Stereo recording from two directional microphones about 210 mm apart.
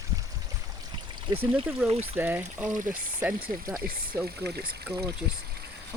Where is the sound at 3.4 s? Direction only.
45° right (ahead or behind).